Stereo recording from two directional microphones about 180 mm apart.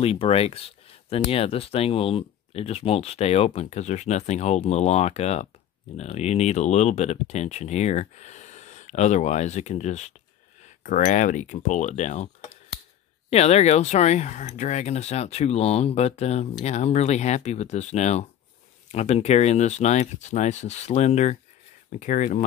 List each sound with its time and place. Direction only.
0.0 s speech: 35° left (ahead or behind)
13.3 s speech: 35° left (ahead or behind)